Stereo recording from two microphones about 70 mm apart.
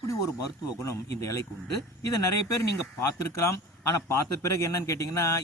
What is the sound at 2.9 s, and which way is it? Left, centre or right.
A man's voice, left.